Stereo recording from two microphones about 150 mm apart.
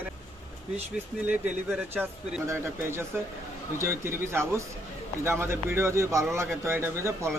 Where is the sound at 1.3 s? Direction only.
10° right (ahead or behind).